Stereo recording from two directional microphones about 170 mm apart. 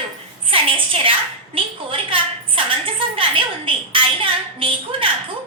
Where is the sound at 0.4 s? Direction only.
30° right (ahead or behind).